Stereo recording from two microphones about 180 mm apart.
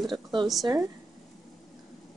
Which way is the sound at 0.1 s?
25° right (ahead or behind).